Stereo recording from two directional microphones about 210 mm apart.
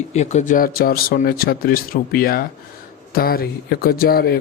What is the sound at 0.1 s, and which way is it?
Speech, 30° left (ahead or behind).